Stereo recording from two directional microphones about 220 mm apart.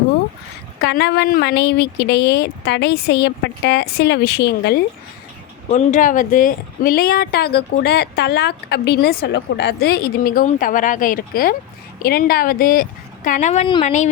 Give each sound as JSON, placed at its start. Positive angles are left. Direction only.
{"t": 0.8, "sound": "a woman's voice", "side_deg": 50}
{"t": 5.7, "sound": "a woman's voice", "side_deg": 35}